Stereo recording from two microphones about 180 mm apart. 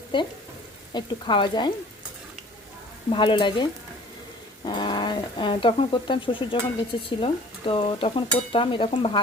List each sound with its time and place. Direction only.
0.1 s stir: 25° left (ahead or behind)
3.1 s stir: 25° left (ahead or behind)
4.6 s speech: 25° left (ahead or behind)
7.2 s stir: 30° left (ahead or behind)